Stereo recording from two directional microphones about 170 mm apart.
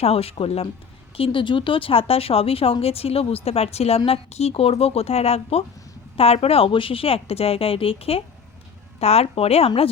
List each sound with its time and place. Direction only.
0.0 s speech: 35° left (ahead or behind)